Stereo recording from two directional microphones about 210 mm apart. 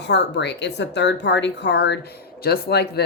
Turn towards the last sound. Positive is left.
turn(degrees=50)  # may be behind; listen again after turning